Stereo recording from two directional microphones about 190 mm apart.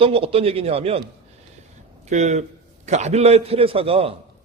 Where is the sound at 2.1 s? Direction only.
35° right (ahead or behind).